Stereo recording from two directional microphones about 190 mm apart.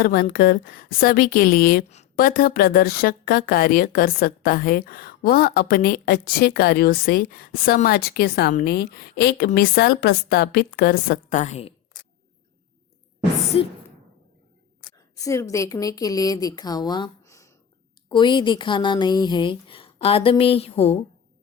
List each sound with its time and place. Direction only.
0.0 s speech: 50° left (ahead or behind); by 11.7 s 35° left (ahead or behind)
13.5 s speech: 30° left (ahead or behind)
14.9 s a woman's voice: 15° left (ahead or behind)